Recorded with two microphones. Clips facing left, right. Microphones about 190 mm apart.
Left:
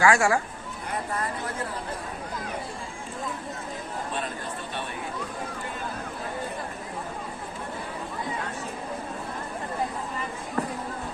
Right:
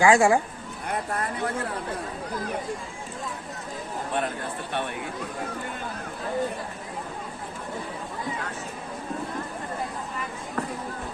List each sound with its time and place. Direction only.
0.0 s speech: 20° right (ahead or behind)